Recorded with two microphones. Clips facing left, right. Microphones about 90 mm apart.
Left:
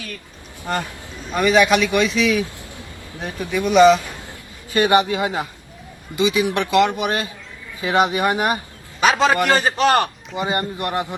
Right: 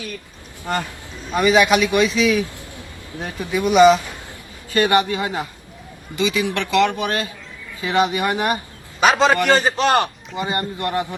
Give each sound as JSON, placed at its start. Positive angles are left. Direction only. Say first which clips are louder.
{"t": 1.3, "sound": "a man's voice", "louder": "even", "side_deg": -5}
{"t": 3.7, "sound": "speech", "louder": "even", "side_deg": -10}
{"t": 4.7, "sound": "a man's voice", "louder": "left 1 dB", "side_deg": 20}
{"t": 9.0, "sound": "a man's voice", "louder": "right 1 dB", "side_deg": 0}
{"t": 10.3, "sound": "a man's voice", "louder": "left 1 dB", "side_deg": 25}